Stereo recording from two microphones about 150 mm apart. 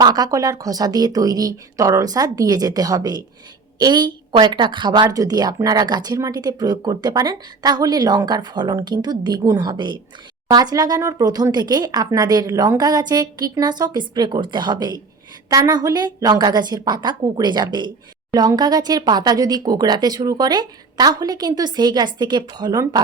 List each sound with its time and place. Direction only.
0.0 s speech: 25° right (ahead or behind)